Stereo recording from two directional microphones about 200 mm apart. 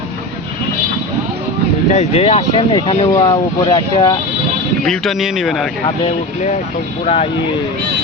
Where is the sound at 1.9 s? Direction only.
30° left (ahead or behind).